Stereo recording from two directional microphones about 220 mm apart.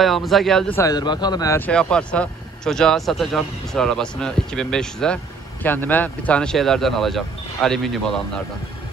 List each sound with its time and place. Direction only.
0.0 s speech: centre (ahead or behind)
0.7 s a man's voice: 15° left (ahead or behind)
1.7 s speech: 5° left (ahead or behind)